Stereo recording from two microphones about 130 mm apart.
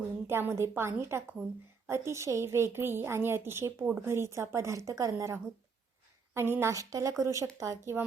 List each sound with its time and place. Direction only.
0.3 s a woman's voice: 20° right (ahead or behind)